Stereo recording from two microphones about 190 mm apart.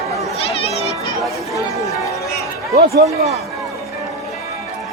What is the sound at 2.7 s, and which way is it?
Speech, 55° right (ahead or behind).